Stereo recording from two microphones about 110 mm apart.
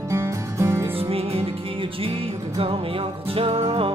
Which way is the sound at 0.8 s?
55° right (ahead or behind).